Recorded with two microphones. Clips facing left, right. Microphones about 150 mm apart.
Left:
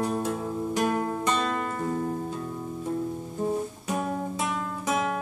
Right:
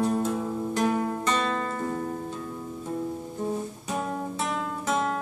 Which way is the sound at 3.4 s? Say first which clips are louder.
Left 4 dB; 10° left (ahead or behind).